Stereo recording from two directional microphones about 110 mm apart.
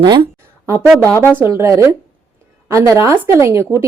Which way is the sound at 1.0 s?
30° right (ahead or behind).